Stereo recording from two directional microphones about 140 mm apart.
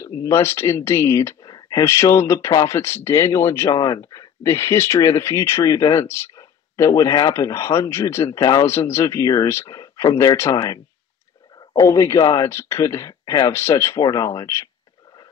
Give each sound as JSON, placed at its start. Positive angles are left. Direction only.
{"t": 0.0, "sound": "speech", "side_deg": 20}